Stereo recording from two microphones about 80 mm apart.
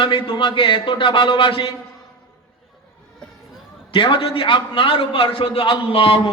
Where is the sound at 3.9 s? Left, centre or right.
Left.